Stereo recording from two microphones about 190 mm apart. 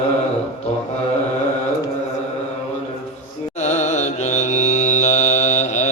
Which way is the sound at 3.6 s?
40° left (ahead or behind).